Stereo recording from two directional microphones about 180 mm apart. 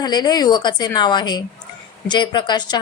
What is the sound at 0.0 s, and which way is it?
A woman's voice, 25° left (ahead or behind).